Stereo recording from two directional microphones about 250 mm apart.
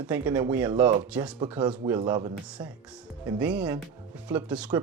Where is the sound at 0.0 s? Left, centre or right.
Centre.